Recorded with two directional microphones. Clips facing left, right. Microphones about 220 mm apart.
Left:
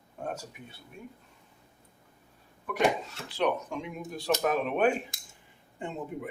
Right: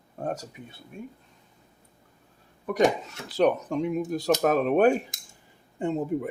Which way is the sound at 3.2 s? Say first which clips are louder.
Right 6 dB; 40° right (ahead or behind).